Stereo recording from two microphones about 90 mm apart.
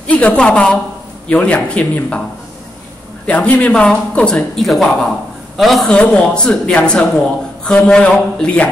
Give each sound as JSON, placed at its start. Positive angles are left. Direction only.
{"t": 0.0, "sound": "a woman's voice", "side_deg": 15}
{"t": 3.3, "sound": "a man's voice", "side_deg": 15}
{"t": 4.6, "sound": "a man's voice", "side_deg": 0}